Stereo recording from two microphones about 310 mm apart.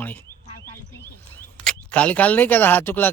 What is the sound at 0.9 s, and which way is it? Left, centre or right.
Speech, centre.